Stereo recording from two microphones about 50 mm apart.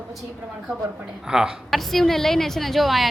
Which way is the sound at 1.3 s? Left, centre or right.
Centre.